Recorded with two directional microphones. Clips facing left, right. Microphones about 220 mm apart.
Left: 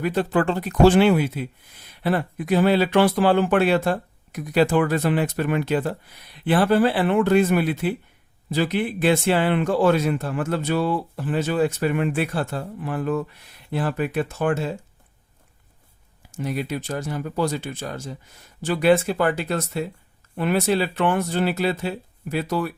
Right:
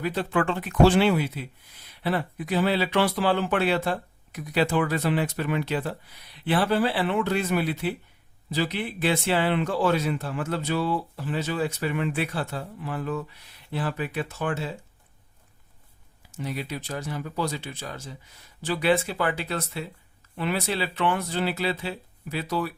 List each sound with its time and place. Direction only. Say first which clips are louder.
0.0 s speech: left 4 dB; 45° left (ahead or behind)
16.3 s speech: left 5 dB; 50° left (ahead or behind)